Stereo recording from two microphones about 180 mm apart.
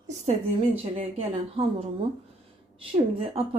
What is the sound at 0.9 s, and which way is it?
Speech, 35° right (ahead or behind).